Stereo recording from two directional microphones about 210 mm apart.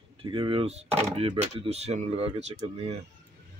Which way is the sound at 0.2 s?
25° right (ahead or behind).